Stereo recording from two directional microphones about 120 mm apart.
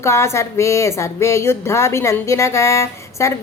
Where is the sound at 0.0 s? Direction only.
25° left (ahead or behind).